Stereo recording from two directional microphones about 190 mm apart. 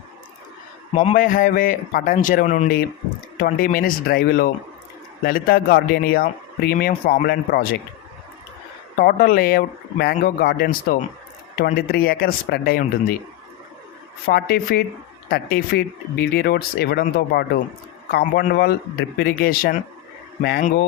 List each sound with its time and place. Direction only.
1.1 s speech: 45° left (ahead or behind)
9.0 s speech: 50° left (ahead or behind)
14.3 s speech: 55° left (ahead or behind)